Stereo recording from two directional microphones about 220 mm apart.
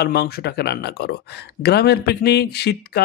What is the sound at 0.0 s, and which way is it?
A man's voice, 45° left (ahead or behind).